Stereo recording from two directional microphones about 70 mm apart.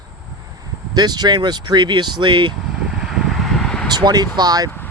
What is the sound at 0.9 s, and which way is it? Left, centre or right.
Speech, right.